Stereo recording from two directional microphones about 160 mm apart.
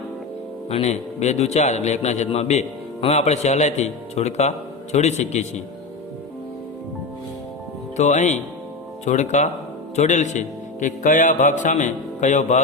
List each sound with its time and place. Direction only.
0.7 s a man's voice: 40° left (ahead or behind)
7.9 s a man's voice: 45° left (ahead or behind)